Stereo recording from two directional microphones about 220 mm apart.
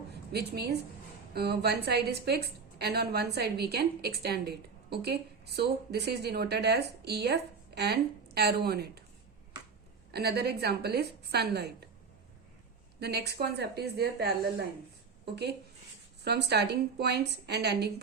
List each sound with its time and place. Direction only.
0.1 s a woman's voice: 45° right (ahead or behind)
10.1 s a woman's voice: 45° right (ahead or behind)
13.0 s a woman's voice: 45° right (ahead or behind)
16.2 s a woman's voice: 50° right (ahead or behind)